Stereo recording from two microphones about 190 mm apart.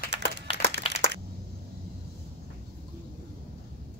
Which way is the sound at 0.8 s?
30° left (ahead or behind).